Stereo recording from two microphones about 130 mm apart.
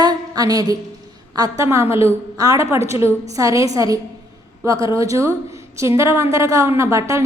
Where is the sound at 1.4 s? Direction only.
25° right (ahead or behind).